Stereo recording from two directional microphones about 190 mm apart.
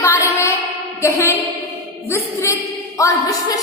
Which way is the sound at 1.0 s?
15° left (ahead or behind).